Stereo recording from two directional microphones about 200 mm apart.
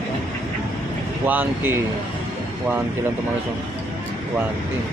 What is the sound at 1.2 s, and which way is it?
Speech, 10° right (ahead or behind).